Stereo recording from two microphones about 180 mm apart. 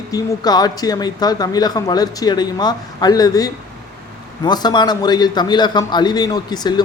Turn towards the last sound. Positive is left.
turn(degrees=25)  # may be behind; listen again after turning